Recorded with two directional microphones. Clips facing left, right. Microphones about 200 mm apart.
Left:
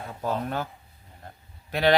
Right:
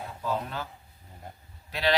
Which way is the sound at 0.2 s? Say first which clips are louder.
Left 4 dB; 55° left (ahead or behind).